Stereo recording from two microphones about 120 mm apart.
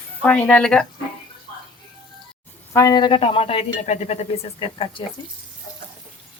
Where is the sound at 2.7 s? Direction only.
30° left (ahead or behind); by 3.6 s 50° left (ahead or behind).